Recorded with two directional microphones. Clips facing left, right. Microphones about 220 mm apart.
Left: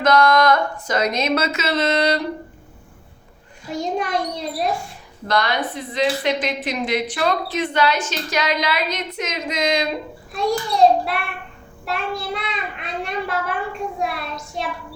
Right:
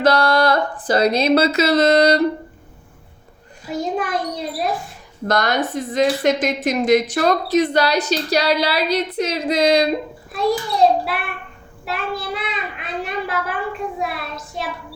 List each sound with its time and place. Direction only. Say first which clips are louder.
0.0 s a woman's voice: even; 35° right (ahead or behind)
3.7 s a child's voice: right 1 dB; centre (ahead or behind)
5.3 s a woman's voice: right 2 dB; 45° right (ahead or behind)
10.3 s a child's voice: right 1 dB; centre (ahead or behind)